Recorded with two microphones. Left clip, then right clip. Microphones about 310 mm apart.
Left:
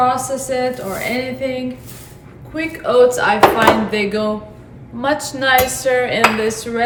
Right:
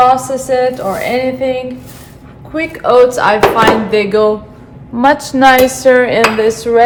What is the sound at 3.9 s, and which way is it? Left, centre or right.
Dishes, centre.